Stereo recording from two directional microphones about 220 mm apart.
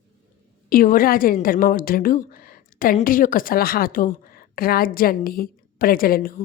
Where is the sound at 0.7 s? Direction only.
40° left (ahead or behind).